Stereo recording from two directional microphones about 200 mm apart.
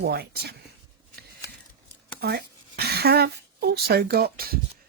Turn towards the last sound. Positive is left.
turn(degrees=-50)  # may be behind; listen again after turning